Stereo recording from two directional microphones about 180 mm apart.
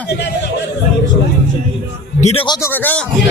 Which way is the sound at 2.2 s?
40° left (ahead or behind).